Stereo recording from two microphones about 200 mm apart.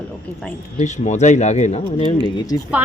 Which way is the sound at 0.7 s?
35° left (ahead or behind).